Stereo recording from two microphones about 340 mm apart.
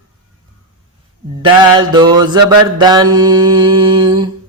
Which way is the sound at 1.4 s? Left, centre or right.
Centre.